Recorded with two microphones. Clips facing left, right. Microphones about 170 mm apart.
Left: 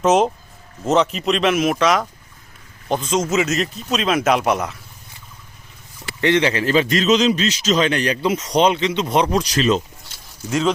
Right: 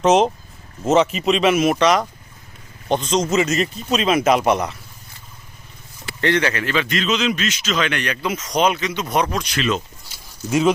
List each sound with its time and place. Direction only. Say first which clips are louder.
0.0 s speech: right 1 dB; centre (ahead or behind)
6.1 s a man's voice: left 2 dB; 20° left (ahead or behind); by 9.8 s 35° left (ahead or behind)